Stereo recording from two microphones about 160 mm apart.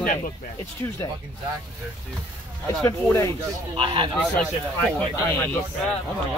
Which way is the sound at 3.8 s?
30° right (ahead or behind).